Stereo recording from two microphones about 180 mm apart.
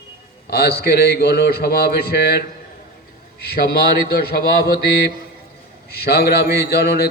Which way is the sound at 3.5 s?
60° left (ahead or behind).